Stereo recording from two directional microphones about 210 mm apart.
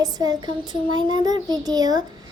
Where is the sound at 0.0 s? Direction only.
20° right (ahead or behind).